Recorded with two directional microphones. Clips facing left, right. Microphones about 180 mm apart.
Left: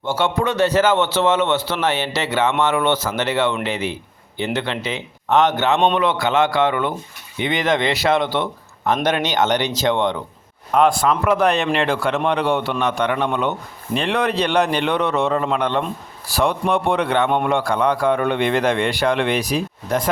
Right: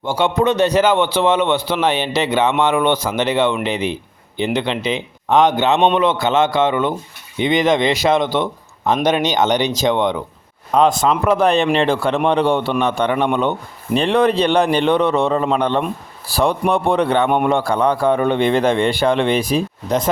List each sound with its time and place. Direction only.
0.0 s a man's voice: 15° right (ahead or behind)
13.9 s a man's voice: 30° right (ahead or behind)